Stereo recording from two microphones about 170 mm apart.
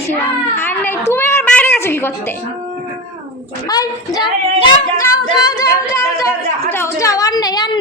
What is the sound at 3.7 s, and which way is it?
Female singing, 25° left (ahead or behind).